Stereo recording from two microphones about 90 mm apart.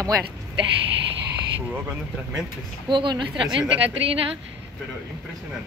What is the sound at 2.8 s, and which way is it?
Speech, 60° right (ahead or behind).